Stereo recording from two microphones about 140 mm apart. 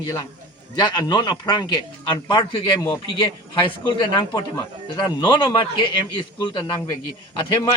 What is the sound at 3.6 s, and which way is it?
Speech, 35° left (ahead or behind).